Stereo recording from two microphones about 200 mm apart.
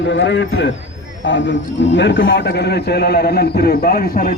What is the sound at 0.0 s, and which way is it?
A man's voice, 65° left (ahead or behind).